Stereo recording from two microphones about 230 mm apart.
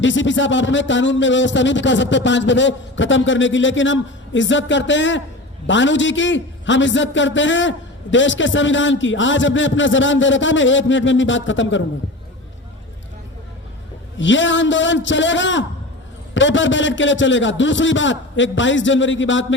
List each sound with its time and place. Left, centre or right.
0.0 s a man's voice: left
14.2 s speech: left